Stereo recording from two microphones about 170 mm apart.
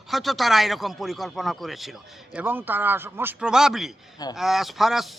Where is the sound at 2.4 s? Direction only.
10° right (ahead or behind).